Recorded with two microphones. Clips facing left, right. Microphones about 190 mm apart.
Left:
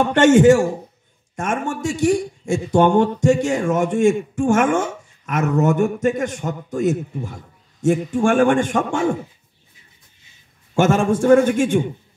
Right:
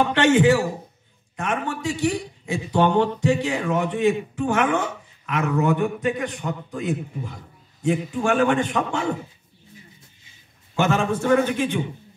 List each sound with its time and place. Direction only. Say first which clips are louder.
0.1 s a man's voice: left 9 dB; 45° left (ahead or behind)
10.7 s a man's voice: left 5 dB; 50° left (ahead or behind)